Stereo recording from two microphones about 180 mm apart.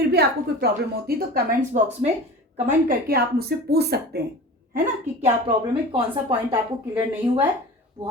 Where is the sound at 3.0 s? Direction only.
60° right (ahead or behind).